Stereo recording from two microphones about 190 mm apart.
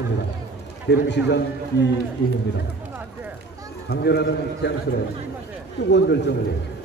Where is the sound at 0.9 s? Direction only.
65° left (ahead or behind).